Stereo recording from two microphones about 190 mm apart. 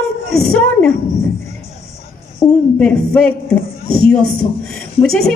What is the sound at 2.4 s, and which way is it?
Speech, 20° left (ahead or behind).